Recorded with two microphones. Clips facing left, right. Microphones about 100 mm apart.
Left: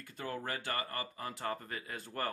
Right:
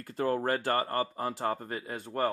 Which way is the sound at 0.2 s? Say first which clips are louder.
Right 11 dB; 40° right (ahead or behind).